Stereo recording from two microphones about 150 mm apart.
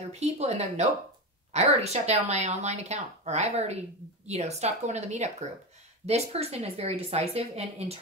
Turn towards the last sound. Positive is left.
turn(degrees=-45)  # may be behind; listen again after turning